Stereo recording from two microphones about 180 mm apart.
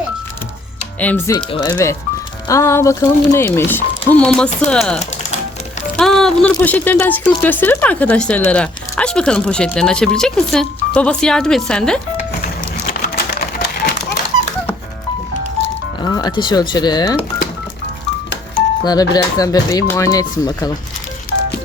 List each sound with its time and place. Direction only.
0.9 s speech: 10° left (ahead or behind)
1.4 s speech: 25° left (ahead or behind); by 4.9 s 5° left (ahead or behind)
4.9 s music: 40° left (ahead or behind)
6.0 s speech: centre (ahead or behind)
12.4 s a sound: 55° left (ahead or behind)
15.6 s speech: 25° left (ahead or behind)
18.9 s speech: 20° left (ahead or behind)